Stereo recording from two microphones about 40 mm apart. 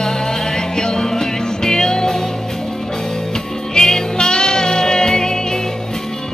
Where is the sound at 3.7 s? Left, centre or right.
Centre.